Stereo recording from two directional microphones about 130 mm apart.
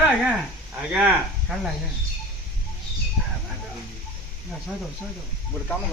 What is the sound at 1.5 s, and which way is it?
Speech, 5° right (ahead or behind).